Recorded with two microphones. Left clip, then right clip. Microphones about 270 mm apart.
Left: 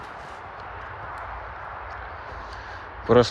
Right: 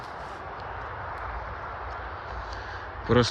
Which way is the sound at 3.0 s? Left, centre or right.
Centre.